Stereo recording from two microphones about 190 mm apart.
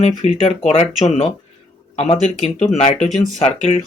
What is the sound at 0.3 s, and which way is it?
Speech, 35° left (ahead or behind).